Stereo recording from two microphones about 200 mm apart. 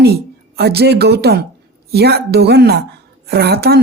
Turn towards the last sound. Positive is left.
turn(degrees=-55)  # may be behind; listen again after turning